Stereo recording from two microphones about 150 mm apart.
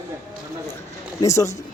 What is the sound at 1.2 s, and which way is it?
Speech, 20° left (ahead or behind).